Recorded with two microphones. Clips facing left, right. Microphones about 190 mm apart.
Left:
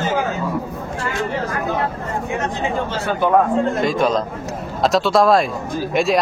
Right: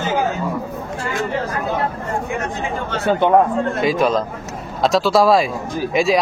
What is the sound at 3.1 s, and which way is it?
Speech, 25° right (ahead or behind).